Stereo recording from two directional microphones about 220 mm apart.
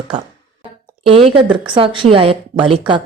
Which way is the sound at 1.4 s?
20° right (ahead or behind).